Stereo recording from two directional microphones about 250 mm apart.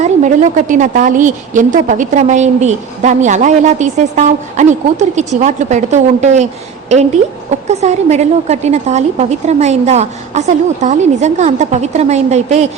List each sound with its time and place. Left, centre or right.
0.0 s a woman's voice: right